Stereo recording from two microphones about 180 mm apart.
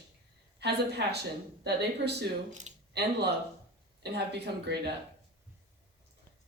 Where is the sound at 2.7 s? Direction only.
40° right (ahead or behind).